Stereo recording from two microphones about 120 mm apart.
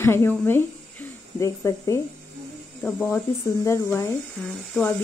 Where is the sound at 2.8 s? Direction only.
15° left (ahead or behind).